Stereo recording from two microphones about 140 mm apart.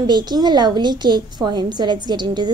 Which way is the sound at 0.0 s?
30° right (ahead or behind).